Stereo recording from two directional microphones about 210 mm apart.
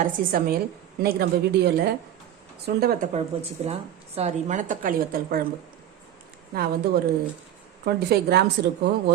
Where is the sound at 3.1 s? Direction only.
30° right (ahead or behind).